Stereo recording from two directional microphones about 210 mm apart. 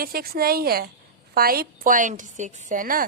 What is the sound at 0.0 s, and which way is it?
A woman's voice, 45° right (ahead or behind).